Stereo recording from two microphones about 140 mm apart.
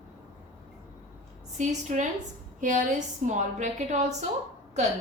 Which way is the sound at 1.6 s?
60° right (ahead or behind).